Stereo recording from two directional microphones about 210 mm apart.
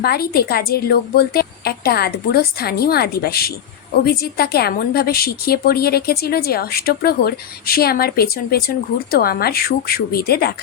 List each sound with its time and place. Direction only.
0.0 s a woman's voice: 45° left (ahead or behind)